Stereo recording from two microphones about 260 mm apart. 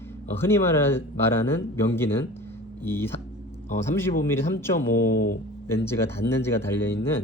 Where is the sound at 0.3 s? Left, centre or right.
Centre.